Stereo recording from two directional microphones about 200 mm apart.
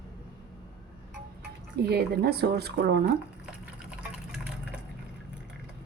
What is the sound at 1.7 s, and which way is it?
Speech, 55° right (ahead or behind).